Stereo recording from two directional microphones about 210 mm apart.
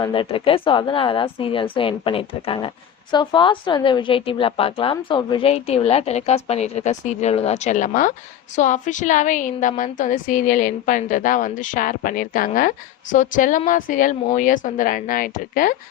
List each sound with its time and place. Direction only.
0.0 s a woman's voice: 25° left (ahead or behind); by 15.7 s 40° left (ahead or behind)